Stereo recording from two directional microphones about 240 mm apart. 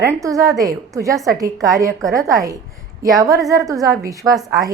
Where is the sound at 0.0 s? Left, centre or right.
Centre.